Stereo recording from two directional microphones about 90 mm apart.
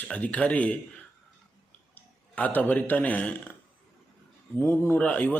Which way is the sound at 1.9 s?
20° left (ahead or behind).